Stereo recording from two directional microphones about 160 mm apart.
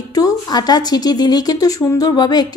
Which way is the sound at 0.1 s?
25° left (ahead or behind).